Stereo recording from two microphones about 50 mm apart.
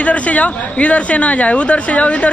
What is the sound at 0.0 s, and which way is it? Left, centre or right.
Speech, left.